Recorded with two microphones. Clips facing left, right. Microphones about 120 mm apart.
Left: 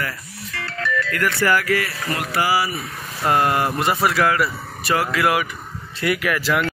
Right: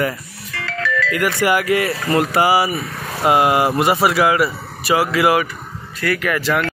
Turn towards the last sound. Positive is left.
turn(degrees=0)  # may be behind; listen again after turning